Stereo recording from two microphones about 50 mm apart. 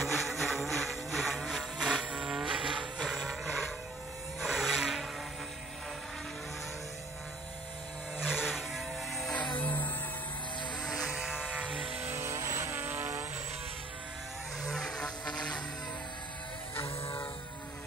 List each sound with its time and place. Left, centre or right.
0.0 s vehicle: centre
8.2 s music: centre
9.3 s music: left
10.8 s vehicle: centre
11.1 s a sound: centre
11.4 s a sound: right
12.3 s vehicle: right
12.7 s vehicle: right
14.7 s music: centre
16.7 s music: left